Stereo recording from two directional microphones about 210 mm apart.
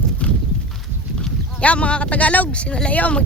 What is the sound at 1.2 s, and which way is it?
Speech, 5° left (ahead or behind).